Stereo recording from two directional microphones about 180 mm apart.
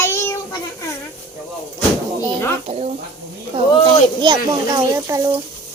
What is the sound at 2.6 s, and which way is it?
Speech, 35° right (ahead or behind).